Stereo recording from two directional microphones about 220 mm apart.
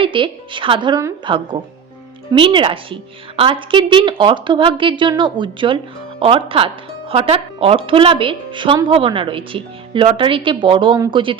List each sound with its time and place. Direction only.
0.0 s a woman's voice: 20° right (ahead or behind)